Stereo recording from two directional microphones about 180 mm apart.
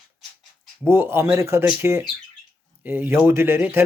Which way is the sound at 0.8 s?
15° right (ahead or behind).